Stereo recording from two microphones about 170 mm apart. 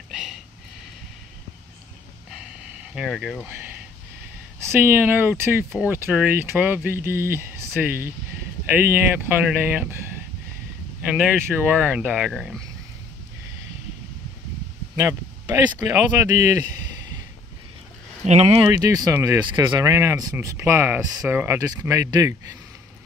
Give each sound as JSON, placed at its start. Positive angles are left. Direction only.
{"t": 0.1, "sound": "a sound", "side_deg": -5}
{"t": 2.3, "sound": "a sound", "side_deg": -5}
{"t": 4.6, "sound": "speech", "side_deg": -15}
{"t": 11.1, "sound": "speech", "side_deg": -10}
{"t": 15.0, "sound": "speech", "side_deg": -15}
{"t": 18.2, "sound": "speech", "side_deg": -40}
{"t": 18.7, "sound": "speech", "side_deg": -20}